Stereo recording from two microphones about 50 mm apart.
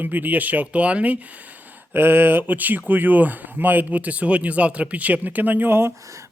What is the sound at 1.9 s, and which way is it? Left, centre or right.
Speech, right.